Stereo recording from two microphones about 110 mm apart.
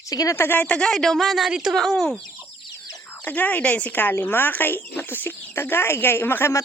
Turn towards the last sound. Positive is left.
turn(degrees=25)  # may be behind; listen again after turning